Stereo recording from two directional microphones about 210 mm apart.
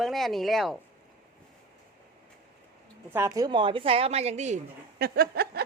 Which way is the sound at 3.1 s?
15° right (ahead or behind).